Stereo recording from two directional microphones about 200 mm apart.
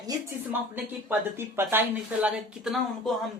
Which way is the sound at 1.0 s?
10° right (ahead or behind).